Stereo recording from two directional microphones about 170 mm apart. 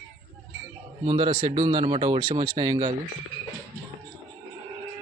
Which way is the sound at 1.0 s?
30° right (ahead or behind).